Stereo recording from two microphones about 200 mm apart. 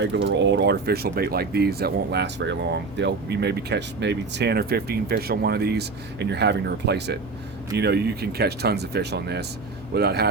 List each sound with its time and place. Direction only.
0.0 s speech: 60° right (ahead or behind)